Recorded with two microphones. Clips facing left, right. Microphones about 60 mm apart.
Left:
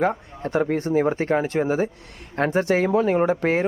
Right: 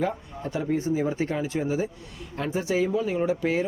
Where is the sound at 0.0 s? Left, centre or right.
Left.